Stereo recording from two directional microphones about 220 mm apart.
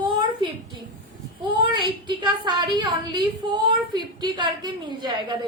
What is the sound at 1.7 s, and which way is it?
A woman's voice, 20° right (ahead or behind).